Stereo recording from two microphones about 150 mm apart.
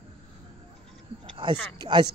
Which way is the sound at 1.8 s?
30° right (ahead or behind).